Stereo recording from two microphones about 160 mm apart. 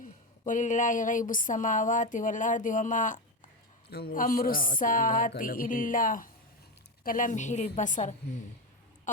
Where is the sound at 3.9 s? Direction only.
75° left (ahead or behind); by 8.2 s 50° left (ahead or behind).